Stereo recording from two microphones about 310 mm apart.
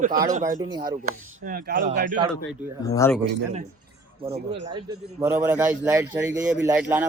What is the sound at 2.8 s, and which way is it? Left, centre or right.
Speech, centre.